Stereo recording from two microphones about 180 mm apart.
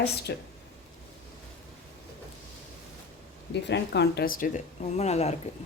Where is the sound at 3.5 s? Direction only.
70° left (ahead or behind); by 5.4 s 35° left (ahead or behind).